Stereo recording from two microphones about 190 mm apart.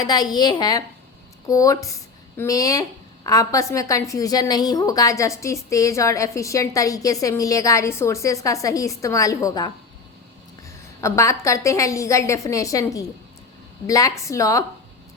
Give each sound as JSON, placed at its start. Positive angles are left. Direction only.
{"t": 0.0, "sound": "a woman's voice", "side_deg": 20}